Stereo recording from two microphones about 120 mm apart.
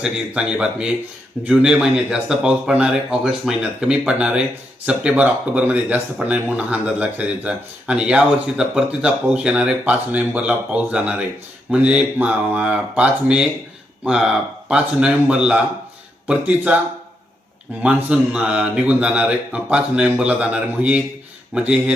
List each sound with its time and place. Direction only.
0.0 s speech: 5° right (ahead or behind)
17.8 s speech: 10° right (ahead or behind)